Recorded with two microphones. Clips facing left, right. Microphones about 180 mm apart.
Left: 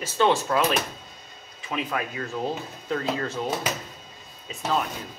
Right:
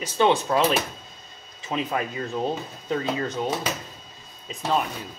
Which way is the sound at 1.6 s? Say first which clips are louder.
Right 2 dB; 25° right (ahead or behind).